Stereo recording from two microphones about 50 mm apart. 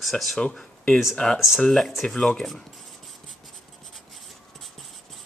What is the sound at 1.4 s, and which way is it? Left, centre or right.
Speech, centre.